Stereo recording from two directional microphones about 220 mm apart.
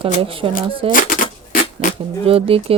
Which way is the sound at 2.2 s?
25° right (ahead or behind).